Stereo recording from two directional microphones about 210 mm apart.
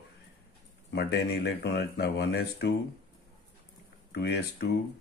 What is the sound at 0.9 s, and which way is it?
Speech, 50° left (ahead or behind).